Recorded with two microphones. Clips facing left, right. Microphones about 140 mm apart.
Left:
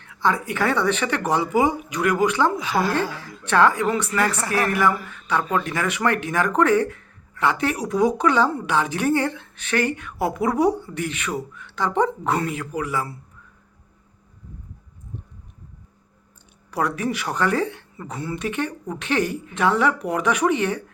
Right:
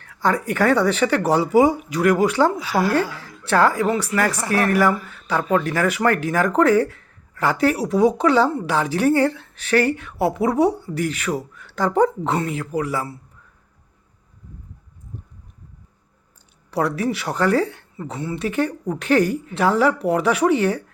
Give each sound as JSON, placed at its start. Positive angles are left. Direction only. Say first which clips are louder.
{"t": 0.0, "sound": "a woman's voice", "louder": "right 2 dB", "side_deg": -40}
{"t": 2.6, "sound": "a woman's voice", "louder": "right 2 dB", "side_deg": -10}
{"t": 2.9, "sound": "a woman's voice", "louder": "right 3 dB", "side_deg": 30}
{"t": 3.4, "sound": "a woman's voice", "louder": "right 1 dB", "side_deg": -35}
{"t": 16.7, "sound": "a woman's voice", "louder": "right 3 dB", "side_deg": -35}